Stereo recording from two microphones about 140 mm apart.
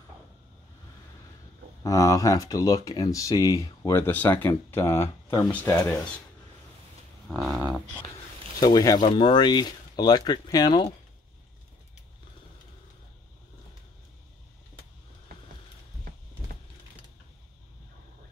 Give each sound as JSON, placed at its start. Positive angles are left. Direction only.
{"t": 1.8, "sound": "speech", "side_deg": 25}
{"t": 7.2, "sound": "a sound", "side_deg": 0}
{"t": 8.5, "sound": "speech", "side_deg": 25}